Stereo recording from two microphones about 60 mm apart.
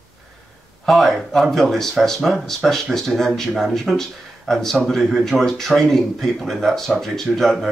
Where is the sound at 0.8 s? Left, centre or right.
Centre.